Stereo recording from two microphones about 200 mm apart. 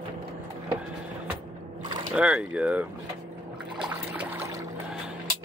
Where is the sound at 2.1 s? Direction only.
5° right (ahead or behind).